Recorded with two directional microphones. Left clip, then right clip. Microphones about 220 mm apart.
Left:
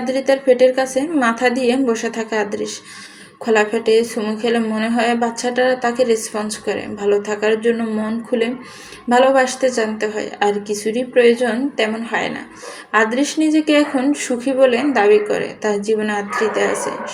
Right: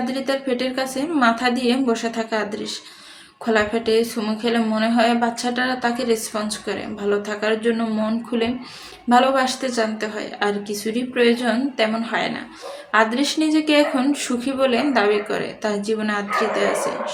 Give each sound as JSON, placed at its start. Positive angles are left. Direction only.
{"t": 0.0, "sound": "a woman's voice", "side_deg": 0}